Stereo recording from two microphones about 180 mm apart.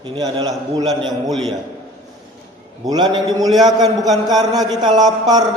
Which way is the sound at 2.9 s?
25° right (ahead or behind).